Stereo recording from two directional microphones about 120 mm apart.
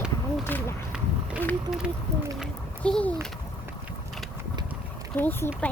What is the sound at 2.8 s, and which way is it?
Speech, 10° left (ahead or behind).